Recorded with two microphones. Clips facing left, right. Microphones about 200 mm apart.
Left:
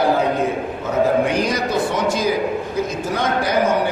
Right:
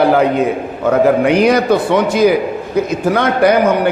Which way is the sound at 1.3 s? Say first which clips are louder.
Right 9 dB; 65° right (ahead or behind).